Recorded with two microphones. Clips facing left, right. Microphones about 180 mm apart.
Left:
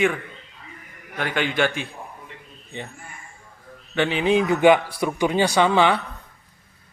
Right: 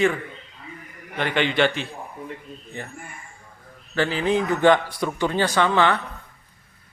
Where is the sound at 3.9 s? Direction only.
20° left (ahead or behind).